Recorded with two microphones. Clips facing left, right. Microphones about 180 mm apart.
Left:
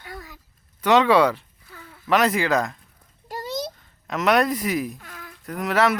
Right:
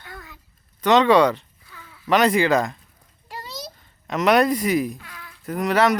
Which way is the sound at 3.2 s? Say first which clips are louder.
Left 7 dB; 45° left (ahead or behind).